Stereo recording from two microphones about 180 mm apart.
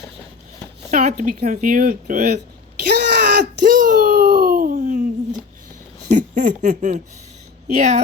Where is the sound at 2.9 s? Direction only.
65° right (ahead or behind).